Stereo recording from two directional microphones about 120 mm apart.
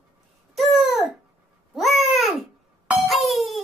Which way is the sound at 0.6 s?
Centre (ahead or behind).